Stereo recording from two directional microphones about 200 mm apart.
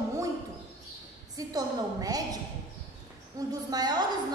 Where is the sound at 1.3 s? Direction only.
20° right (ahead or behind).